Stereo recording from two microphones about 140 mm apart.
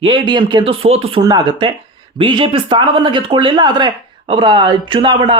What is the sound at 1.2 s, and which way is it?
Speech, 30° right (ahead or behind).